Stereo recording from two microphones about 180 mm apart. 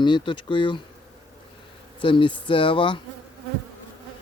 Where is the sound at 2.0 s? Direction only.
25° left (ahead or behind).